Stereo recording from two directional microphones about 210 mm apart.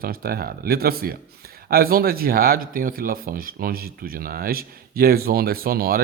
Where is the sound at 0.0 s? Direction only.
45° right (ahead or behind).